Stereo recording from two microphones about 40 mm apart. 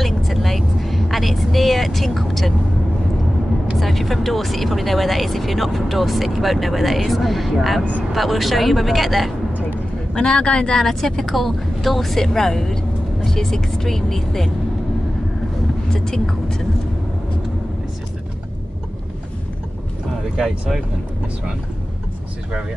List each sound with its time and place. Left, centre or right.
0.0 s vehicle: centre
3.8 s speech: centre
9.5 s a sound: right
10.1 s speech: left
10.8 s speech: centre
15.9 s speech: centre